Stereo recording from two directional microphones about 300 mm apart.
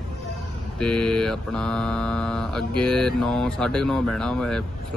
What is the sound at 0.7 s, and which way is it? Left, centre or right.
Mantra, centre.